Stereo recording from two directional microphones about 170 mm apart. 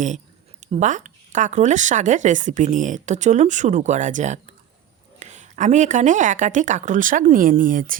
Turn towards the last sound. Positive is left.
turn(degrees=-55)  # may be behind; listen again after turning